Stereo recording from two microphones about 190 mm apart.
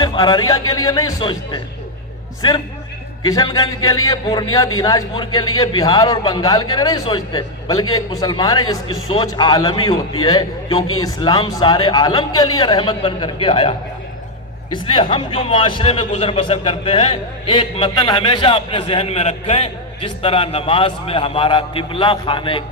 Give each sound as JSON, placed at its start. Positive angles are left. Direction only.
{"t": 0.0, "sound": "a man's voice", "side_deg": 20}
{"t": 3.2, "sound": "a man's voice", "side_deg": 20}